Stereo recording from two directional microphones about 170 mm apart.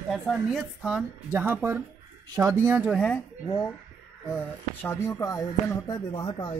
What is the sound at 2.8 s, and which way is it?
Speech, 5° left (ahead or behind).